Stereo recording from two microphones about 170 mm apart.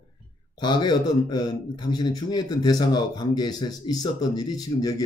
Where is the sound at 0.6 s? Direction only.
25° left (ahead or behind).